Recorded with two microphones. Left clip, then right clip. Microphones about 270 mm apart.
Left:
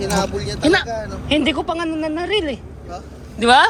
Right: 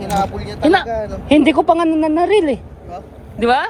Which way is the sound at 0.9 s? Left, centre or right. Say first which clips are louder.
Right 4 dB; right.